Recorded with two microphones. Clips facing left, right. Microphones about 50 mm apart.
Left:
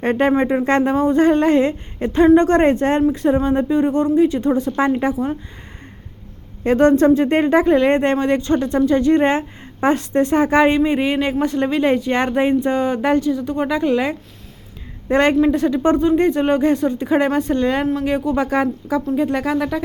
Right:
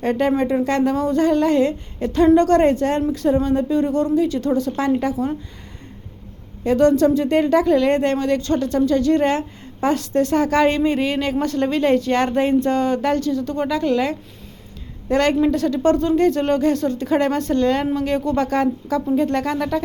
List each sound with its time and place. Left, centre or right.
0.0 s a woman's voice: left
5.1 s speech: centre
6.7 s a woman's voice: left; by 19.8 s centre